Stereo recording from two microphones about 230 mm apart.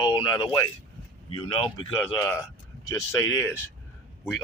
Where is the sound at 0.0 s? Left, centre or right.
Centre.